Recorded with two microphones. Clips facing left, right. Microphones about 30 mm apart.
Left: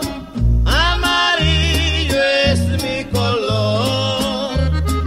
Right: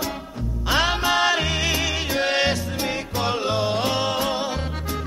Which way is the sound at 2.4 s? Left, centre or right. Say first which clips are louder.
Left 5 dB; left.